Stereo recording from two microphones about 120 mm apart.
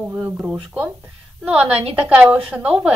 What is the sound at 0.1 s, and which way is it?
A woman's voice, 15° right (ahead or behind).